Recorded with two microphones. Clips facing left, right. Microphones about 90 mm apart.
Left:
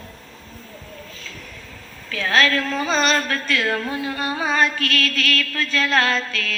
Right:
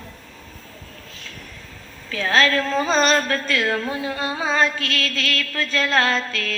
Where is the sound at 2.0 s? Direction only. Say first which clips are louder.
Even; 25° right (ahead or behind).